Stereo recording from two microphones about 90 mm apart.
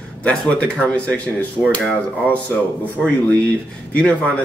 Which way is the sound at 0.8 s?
15° left (ahead or behind).